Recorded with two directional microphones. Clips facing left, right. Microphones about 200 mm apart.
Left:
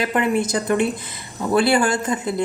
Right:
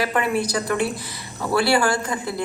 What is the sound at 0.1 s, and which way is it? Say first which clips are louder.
A woman's voice: left 2 dB; 20° left (ahead or behind).